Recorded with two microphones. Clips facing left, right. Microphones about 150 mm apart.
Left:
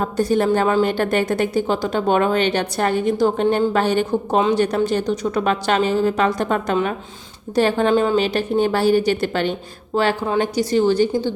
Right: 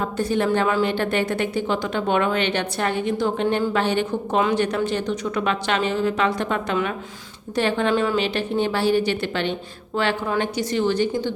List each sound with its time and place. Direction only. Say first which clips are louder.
0.0 s a woman's voice: left 4 dB; 40° left (ahead or behind)